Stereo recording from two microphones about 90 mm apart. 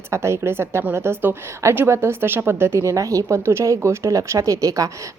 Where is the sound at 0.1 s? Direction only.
30° right (ahead or behind).